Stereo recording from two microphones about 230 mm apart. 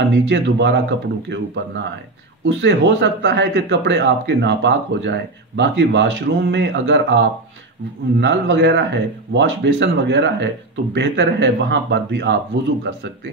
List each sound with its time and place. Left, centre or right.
0.1 s speech: right